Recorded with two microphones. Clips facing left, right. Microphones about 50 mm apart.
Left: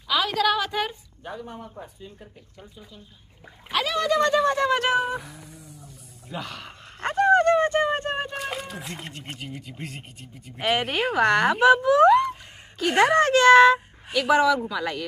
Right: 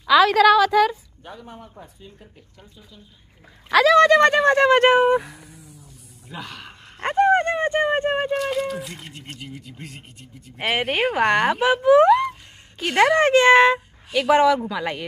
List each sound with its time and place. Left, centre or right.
0.0 s a woman's voice: right
1.2 s speech: centre
3.7 s speech: right
5.3 s a sound: centre
7.1 s a sound: right
8.4 s speech: centre
10.6 s speech: centre
13.2 s speech: right